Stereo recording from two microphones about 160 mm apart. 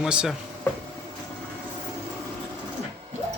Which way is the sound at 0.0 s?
5° right (ahead or behind).